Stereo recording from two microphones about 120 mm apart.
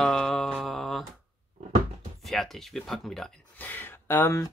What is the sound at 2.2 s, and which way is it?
Speech, centre (ahead or behind).